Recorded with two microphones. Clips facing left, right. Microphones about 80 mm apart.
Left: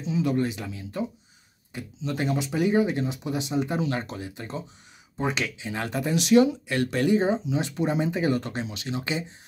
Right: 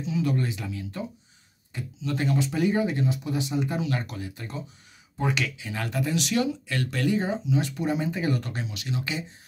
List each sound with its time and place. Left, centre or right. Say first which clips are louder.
0.0 s speech: left 2 dB; left